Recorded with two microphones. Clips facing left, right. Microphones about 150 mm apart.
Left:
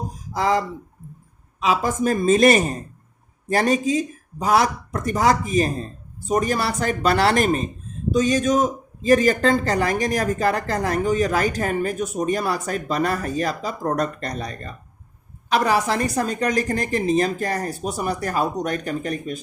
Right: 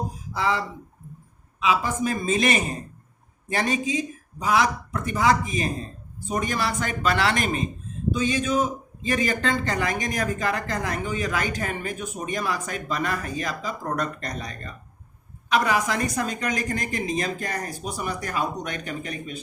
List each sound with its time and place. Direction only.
0.3 s speech: 40° left (ahead or behind)
1.6 s speech: 40° left (ahead or behind)